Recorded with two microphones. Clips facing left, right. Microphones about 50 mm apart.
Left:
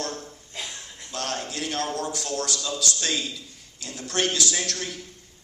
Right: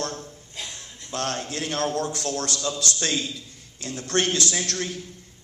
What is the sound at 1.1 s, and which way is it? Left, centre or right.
A man's voice, right.